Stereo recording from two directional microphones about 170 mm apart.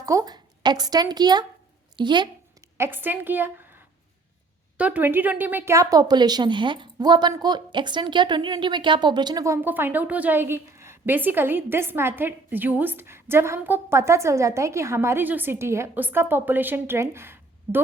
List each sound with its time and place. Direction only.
0.0 s a woman's voice: 20° right (ahead or behind)
2.0 s a sound: 25° right (ahead or behind)
2.7 s a woman's voice: 15° right (ahead or behind)